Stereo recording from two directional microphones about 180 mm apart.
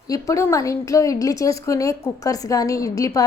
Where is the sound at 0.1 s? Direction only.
15° left (ahead or behind).